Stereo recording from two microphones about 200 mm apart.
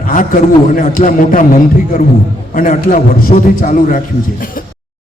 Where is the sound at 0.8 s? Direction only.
45° left (ahead or behind).